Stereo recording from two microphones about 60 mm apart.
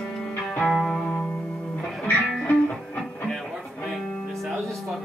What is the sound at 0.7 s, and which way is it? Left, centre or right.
Music, centre.